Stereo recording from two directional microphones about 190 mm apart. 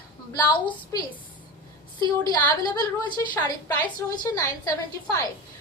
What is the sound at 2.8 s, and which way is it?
A woman's voice, 20° left (ahead or behind).